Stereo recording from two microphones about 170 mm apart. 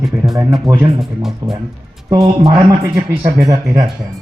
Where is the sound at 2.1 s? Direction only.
20° right (ahead or behind).